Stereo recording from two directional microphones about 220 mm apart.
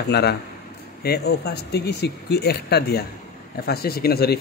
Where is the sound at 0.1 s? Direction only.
45° left (ahead or behind).